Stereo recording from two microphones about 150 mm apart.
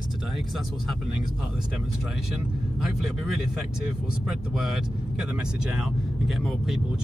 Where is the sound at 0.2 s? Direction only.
Centre (ahead or behind).